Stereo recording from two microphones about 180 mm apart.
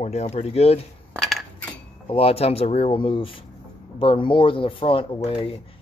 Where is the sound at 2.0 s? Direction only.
35° left (ahead or behind).